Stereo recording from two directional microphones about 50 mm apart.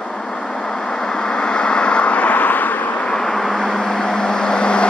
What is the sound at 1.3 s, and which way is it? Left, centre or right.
Vehicle, centre.